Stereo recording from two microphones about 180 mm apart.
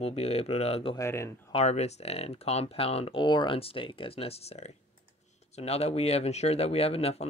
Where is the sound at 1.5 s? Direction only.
35° left (ahead or behind).